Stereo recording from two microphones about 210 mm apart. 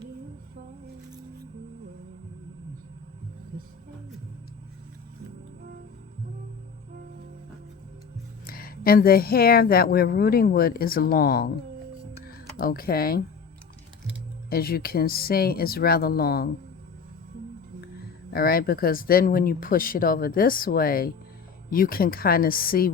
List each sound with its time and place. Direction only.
8.4 s speech: 45° left (ahead or behind)
14.5 s speech: 45° left (ahead or behind)
18.3 s speech: 45° left (ahead or behind)